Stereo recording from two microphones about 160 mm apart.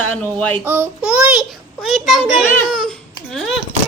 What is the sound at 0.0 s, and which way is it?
Speech, 10° left (ahead or behind).